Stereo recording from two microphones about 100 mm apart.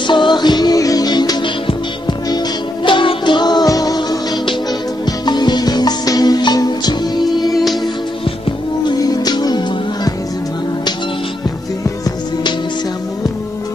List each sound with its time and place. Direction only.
0.0 s music: 50° left (ahead or behind)
9.0 s music: 40° left (ahead or behind)